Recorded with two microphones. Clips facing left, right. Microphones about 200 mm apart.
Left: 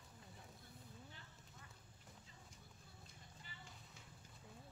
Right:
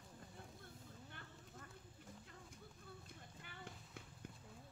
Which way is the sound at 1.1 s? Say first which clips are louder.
Right 5 dB; 60° right (ahead or behind).